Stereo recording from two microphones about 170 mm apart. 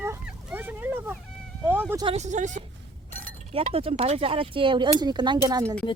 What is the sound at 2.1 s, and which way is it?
Speech, 45° right (ahead or behind).